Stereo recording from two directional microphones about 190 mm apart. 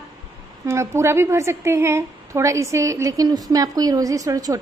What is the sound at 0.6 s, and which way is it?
A woman's voice, 15° right (ahead or behind).